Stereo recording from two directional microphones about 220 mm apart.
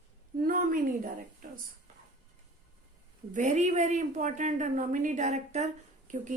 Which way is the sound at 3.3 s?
35° right (ahead or behind).